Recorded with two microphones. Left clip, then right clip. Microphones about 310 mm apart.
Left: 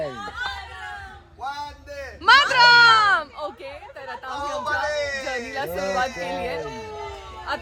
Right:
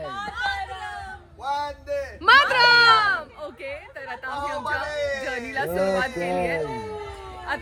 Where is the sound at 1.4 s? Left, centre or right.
Centre.